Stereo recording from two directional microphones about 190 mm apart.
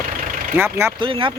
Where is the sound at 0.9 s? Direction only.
25° right (ahead or behind).